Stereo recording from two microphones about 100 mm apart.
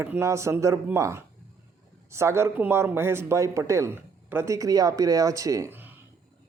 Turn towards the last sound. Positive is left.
turn(degrees=-20)  # may be behind; listen again after turning